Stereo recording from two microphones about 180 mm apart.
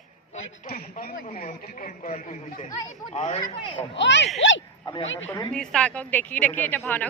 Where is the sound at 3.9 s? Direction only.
85° left.